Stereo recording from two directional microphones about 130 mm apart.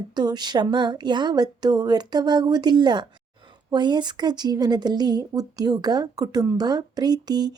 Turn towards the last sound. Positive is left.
turn(degrees=-30)  # may be behind; listen again after turning